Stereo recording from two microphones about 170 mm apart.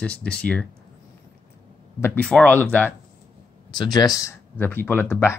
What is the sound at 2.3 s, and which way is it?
Speech, 10° left (ahead or behind).